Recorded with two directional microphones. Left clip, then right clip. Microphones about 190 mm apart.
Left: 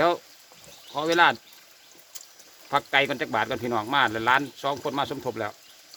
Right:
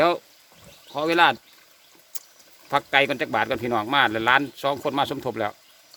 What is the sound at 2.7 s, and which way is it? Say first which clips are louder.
Speech: right 2 dB; 30° right (ahead or behind).